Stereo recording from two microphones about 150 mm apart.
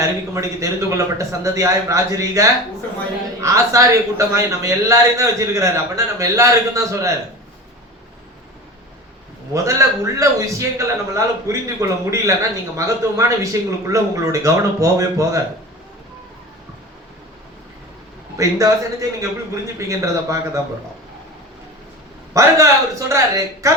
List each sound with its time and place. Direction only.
0.0 s a man's voice: 20° right (ahead or behind)
9.5 s a man's voice: 20° right (ahead or behind)
18.3 s a man's voice: 20° right (ahead or behind)
22.4 s a man's voice: 20° right (ahead or behind)